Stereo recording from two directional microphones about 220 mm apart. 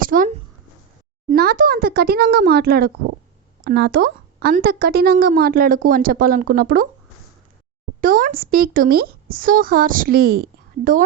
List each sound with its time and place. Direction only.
0.0 s a sound: 40° right (ahead or behind)
1.3 s a woman's voice: 40° right (ahead or behind)
8.0 s a woman's voice: 40° right (ahead or behind)